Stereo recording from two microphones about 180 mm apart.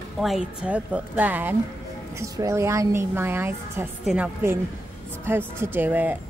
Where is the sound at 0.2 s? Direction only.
5° right (ahead or behind).